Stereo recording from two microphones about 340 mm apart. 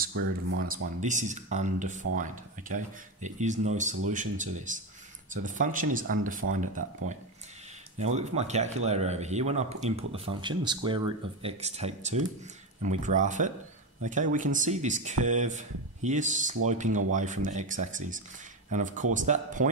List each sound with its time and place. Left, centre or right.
0.0 s speech: right
1.0 s speech: right
8.0 s speech: centre